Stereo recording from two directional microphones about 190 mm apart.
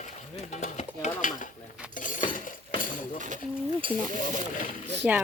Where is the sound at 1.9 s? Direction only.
45° left (ahead or behind).